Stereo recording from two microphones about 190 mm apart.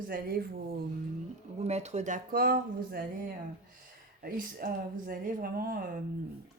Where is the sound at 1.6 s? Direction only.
35° right (ahead or behind); by 3.0 s 50° right (ahead or behind).